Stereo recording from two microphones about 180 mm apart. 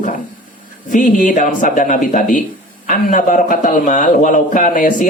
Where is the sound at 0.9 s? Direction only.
45° left (ahead or behind).